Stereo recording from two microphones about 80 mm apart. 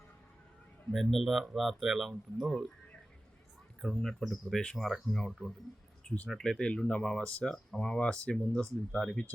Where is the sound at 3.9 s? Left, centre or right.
Centre.